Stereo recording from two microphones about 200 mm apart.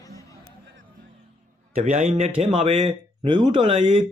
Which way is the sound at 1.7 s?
35° right (ahead or behind).